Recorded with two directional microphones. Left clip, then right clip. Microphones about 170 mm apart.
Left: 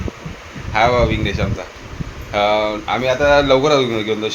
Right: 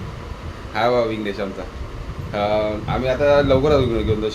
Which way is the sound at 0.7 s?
5° left (ahead or behind).